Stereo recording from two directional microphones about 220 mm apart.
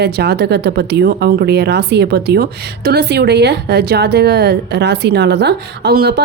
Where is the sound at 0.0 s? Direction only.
50° right (ahead or behind).